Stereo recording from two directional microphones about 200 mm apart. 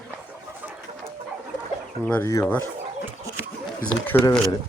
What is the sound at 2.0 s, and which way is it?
Speech, 10° left (ahead or behind).